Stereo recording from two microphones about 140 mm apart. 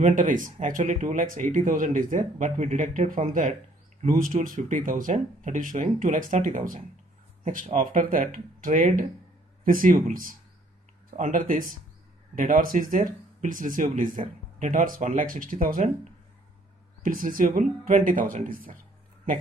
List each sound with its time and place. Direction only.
0.0 s speech: 70° right (ahead or behind)
11.1 s speech: 70° right (ahead or behind)
12.4 s speech: 85° right
17.0 s speech: 80° right